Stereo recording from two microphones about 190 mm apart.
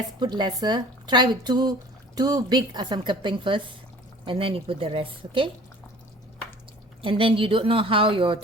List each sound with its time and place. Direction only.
0.2 s speech: 20° right (ahead or behind)
7.0 s speech: 30° right (ahead or behind)